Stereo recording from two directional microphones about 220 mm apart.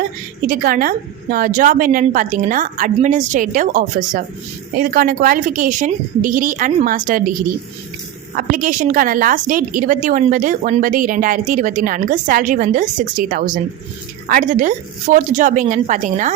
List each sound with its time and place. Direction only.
0.4 s a woman's voice: 40° right (ahead or behind)
8.4 s a woman's voice: 40° right (ahead or behind)